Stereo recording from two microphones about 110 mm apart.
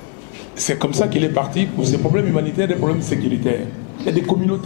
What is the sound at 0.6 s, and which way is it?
Speech, 15° left (ahead or behind).